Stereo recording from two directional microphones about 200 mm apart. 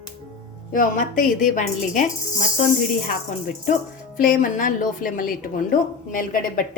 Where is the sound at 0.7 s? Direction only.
45° left (ahead or behind).